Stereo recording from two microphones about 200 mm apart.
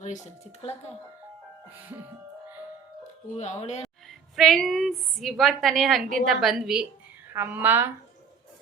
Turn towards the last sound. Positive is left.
turn(degrees=-10)  # may be behind; listen again after turning